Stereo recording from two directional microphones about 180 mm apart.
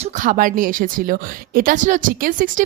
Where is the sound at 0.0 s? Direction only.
50° right (ahead or behind).